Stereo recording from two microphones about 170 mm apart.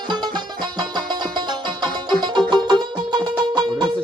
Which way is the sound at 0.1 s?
25° right (ahead or behind).